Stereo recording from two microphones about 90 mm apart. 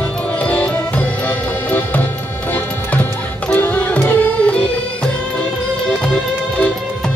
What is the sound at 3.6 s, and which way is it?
Music, 15° left (ahead or behind).